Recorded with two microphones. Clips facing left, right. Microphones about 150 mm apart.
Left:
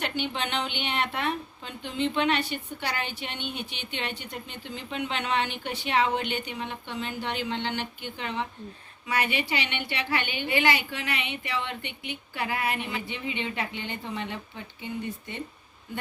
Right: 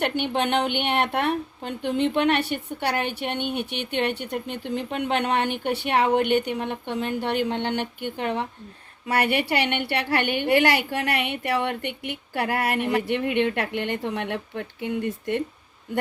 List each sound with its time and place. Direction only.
0.0 s a woman's voice: 60° right (ahead or behind)
9.0 s a woman's voice: 65° right (ahead or behind)